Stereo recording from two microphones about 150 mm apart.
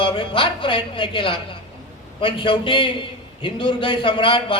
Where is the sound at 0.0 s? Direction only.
35° left (ahead or behind).